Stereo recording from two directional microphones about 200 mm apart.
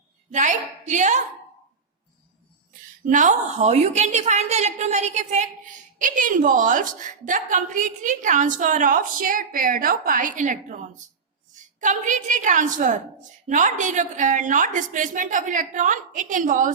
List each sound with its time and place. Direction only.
0.3 s a woman's voice: 35° right (ahead or behind)
3.1 s a woman's voice: 40° right (ahead or behind)